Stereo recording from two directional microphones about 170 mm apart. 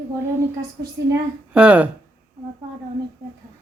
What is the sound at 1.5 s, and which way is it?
Speech, 10° right (ahead or behind).